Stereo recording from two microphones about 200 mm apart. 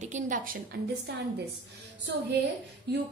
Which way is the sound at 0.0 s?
40° right (ahead or behind).